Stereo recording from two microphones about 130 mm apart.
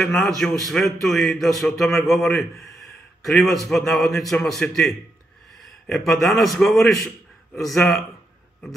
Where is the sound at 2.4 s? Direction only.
Centre (ahead or behind).